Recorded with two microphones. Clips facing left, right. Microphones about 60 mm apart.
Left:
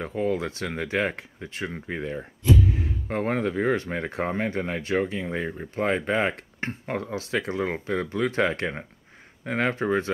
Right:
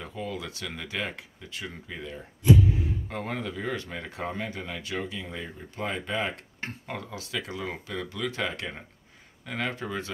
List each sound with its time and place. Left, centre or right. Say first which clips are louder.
0.0 s speech: left 9 dB; left